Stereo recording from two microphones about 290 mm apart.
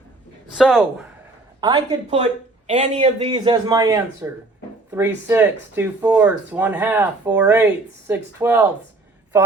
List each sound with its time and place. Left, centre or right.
0.5 s speech: centre
1.6 s a woman's voice: centre